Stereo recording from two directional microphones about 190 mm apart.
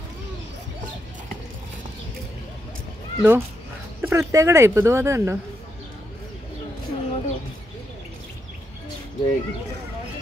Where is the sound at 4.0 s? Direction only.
15° right (ahead or behind).